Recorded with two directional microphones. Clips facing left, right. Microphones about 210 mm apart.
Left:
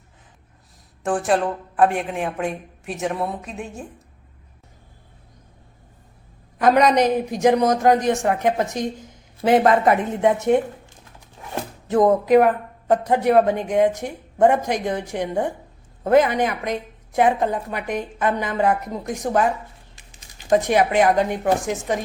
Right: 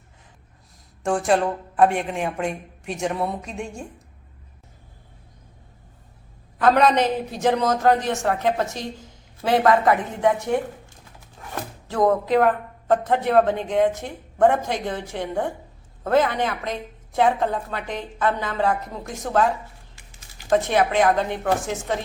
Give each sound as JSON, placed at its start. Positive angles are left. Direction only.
{"t": 1.0, "sound": "speech", "side_deg": 0}
{"t": 6.6, "sound": "speech", "side_deg": 15}
{"t": 11.5, "sound": "speech", "side_deg": 20}